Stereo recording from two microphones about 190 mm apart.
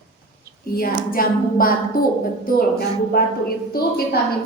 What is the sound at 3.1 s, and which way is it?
A woman's voice, 55° left (ahead or behind).